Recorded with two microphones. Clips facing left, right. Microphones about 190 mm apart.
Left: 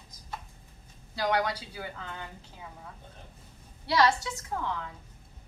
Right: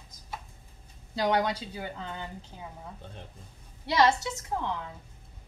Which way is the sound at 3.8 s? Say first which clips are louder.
Right 1 dB; 20° right (ahead or behind).